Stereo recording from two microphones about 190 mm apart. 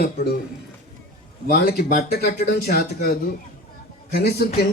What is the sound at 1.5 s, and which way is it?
Speech, 50° left (ahead or behind).